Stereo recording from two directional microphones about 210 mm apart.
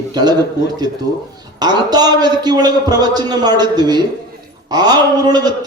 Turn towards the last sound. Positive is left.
turn(degrees=-20)  # may be behind; listen again after turning